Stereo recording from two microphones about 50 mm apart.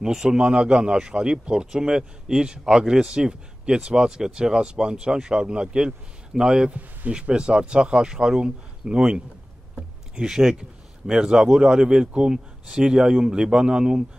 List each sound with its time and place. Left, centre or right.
0.0 s a man's voice: centre
9.8 s a sound: centre
11.4 s a man's voice: centre